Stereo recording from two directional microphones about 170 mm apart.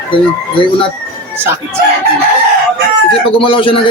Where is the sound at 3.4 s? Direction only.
30° left (ahead or behind).